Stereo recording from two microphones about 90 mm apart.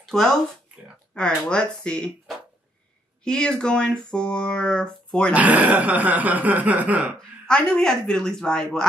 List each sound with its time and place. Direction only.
0.0 s speech: 5° left (ahead or behind)
3.3 s speech: 10° left (ahead or behind)
5.3 s speech: 15° right (ahead or behind)
7.2 s speech: 10° left (ahead or behind)